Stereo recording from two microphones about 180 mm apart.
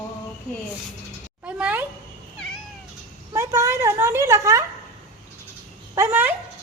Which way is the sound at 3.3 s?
15° right (ahead or behind).